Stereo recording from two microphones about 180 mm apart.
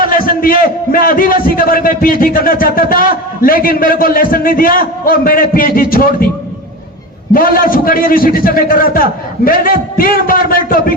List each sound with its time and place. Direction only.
0.0 s a sound: 50° left (ahead or behind)
0.6 s a man's voice: 55° left (ahead or behind)
7.3 s a man's voice: 50° left (ahead or behind)